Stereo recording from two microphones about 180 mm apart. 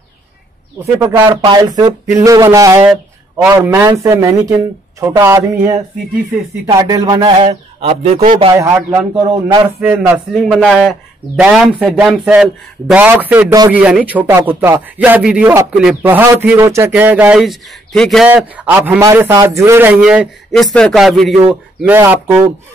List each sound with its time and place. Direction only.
1.0 s speech: 10° right (ahead or behind)
1.3 s speech: 25° right (ahead or behind)
8.5 s speech: 15° right (ahead or behind)